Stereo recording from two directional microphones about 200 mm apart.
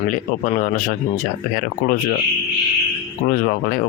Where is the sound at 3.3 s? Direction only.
45° left (ahead or behind).